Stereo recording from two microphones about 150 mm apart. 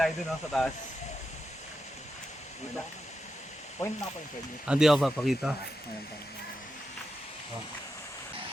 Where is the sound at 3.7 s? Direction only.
20° left (ahead or behind).